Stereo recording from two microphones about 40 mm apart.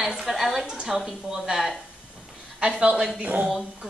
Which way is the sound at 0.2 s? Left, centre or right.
Centre.